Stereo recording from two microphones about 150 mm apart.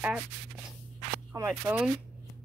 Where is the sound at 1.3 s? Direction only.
15° right (ahead or behind).